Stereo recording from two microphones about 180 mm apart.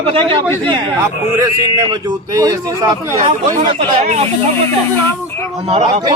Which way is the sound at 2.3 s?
20° right (ahead or behind).